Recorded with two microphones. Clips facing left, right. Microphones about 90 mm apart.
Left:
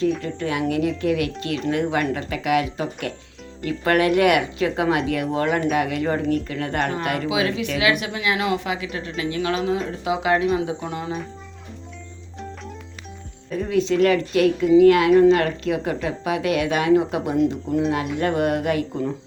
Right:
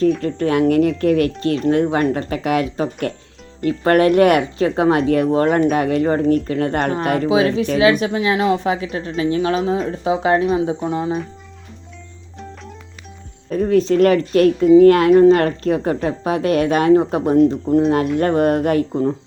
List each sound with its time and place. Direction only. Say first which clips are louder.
0.2 s speech: right 8 dB; 45° right (ahead or behind); by 11.2 s 30° right (ahead or behind)
13.5 s speech: right 6 dB; 45° right (ahead or behind)